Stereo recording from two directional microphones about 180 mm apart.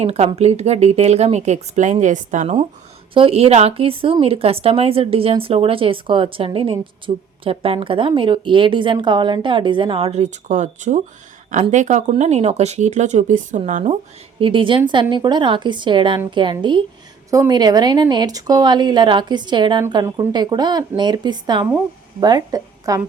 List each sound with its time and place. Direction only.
0.0 s speech: 35° right (ahead or behind)
14.3 s a woman's voice: 30° right (ahead or behind)